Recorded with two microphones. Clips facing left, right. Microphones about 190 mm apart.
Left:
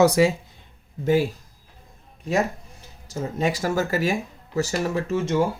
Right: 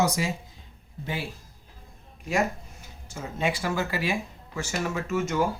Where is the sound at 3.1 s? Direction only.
40° left (ahead or behind).